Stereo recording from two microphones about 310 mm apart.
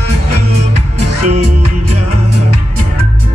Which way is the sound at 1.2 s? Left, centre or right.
Right.